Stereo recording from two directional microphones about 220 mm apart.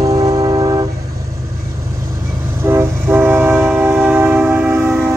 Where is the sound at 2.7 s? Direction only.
10° right (ahead or behind).